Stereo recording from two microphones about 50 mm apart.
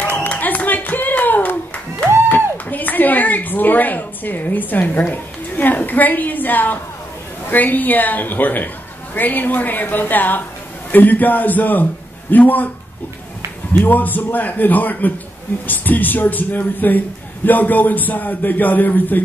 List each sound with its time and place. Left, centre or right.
0.0 s clapping: left
0.3 s music: left
2.2 s a sound: left
7.4 s a man's voice: left
13.7 s a man's voice: left